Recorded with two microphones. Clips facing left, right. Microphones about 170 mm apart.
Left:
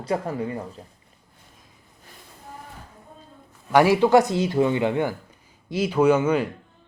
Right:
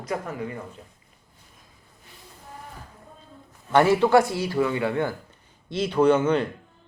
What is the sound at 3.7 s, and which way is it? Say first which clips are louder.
Speech: left 1 dB; 10° left (ahead or behind).